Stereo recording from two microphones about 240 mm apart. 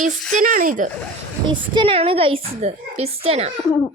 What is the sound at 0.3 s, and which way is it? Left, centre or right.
Speech, right.